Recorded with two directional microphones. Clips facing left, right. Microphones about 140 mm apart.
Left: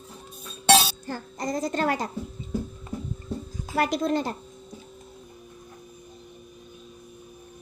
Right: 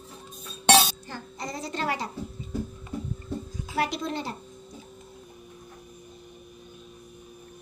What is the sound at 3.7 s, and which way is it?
Speech, 45° left (ahead or behind).